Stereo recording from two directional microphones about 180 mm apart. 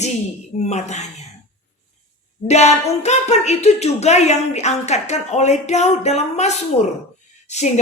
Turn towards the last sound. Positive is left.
turn(degrees=40)  # may be behind; listen again after turning